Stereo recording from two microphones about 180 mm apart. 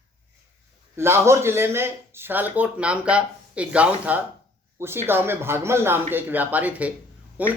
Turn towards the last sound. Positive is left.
turn(degrees=-10)  # may be behind; listen again after turning